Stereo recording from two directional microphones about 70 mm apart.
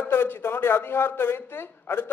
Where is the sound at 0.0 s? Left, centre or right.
Left.